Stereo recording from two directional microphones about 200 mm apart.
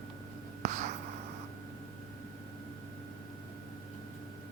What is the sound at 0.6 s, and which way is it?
Writing, 35° right (ahead or behind).